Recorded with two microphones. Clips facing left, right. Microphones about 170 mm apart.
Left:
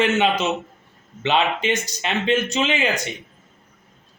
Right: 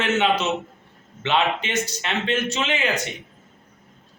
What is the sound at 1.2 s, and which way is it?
A man's voice, 15° left (ahead or behind).